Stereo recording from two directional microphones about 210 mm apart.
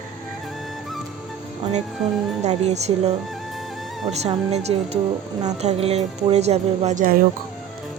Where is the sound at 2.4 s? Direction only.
30° right (ahead or behind).